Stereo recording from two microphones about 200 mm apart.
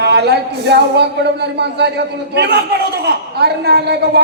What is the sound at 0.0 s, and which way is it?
A man's voice, 55° right (ahead or behind).